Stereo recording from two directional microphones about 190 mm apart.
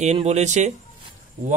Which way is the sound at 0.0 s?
35° right (ahead or behind).